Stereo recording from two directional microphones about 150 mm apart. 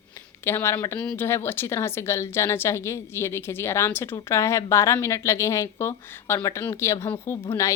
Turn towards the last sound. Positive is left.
turn(degrees=20)  # may be behind; listen again after turning